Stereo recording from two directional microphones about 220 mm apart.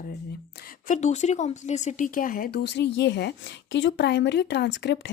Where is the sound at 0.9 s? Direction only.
30° left (ahead or behind).